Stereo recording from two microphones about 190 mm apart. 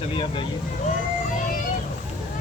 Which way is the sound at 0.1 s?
25° left (ahead or behind).